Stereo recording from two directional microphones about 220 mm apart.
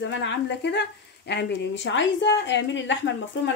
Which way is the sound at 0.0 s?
55° left (ahead or behind).